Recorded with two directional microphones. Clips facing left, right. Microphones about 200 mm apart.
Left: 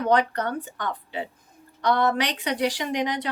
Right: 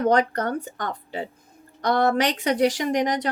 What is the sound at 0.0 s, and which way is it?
Speech, 45° right (ahead or behind).